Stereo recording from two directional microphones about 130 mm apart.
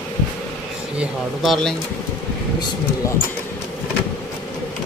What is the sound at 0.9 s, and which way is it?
Speech, centre (ahead or behind).